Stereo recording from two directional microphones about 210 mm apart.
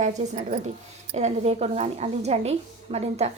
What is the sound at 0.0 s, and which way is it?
A woman's voice, 35° right (ahead or behind).